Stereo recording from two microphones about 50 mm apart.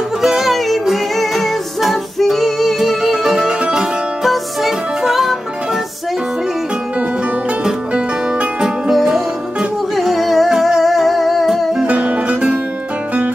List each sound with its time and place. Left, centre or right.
0.2 s music: centre
7.6 s music: centre
9.9 s music: centre
11.8 s music: right